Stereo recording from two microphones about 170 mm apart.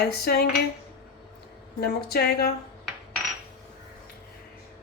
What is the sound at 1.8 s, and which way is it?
Speech, 65° left (ahead or behind).